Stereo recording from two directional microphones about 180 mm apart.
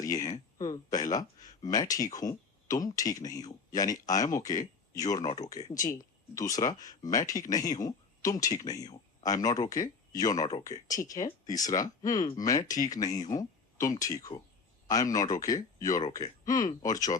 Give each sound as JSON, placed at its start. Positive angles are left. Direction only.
{"t": 0.0, "sound": "a sound", "side_deg": 20}
{"t": 0.9, "sound": "speech", "side_deg": 20}
{"t": 12.7, "sound": "speech", "side_deg": 50}
{"t": 13.2, "sound": "speech", "side_deg": 20}